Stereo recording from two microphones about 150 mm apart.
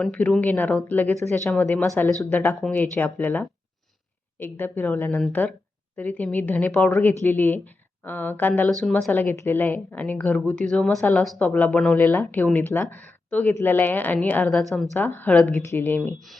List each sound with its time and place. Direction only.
0.0 s speech: 10° left (ahead or behind)
14.9 s speech: 10° left (ahead or behind)
16.0 s speech: 5° left (ahead or behind)